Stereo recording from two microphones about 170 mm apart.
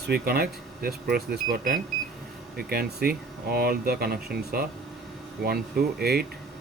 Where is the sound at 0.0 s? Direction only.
65° right (ahead or behind).